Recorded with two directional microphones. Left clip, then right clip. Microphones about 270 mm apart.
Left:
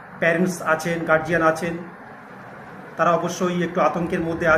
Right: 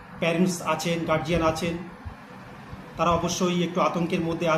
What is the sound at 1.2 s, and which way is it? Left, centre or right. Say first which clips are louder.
Speech: left 5 dB; centre.